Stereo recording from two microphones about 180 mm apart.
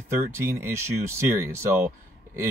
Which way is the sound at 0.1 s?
15° right (ahead or behind).